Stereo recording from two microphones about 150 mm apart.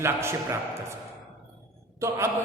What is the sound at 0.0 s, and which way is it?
Speech, 15° right (ahead or behind).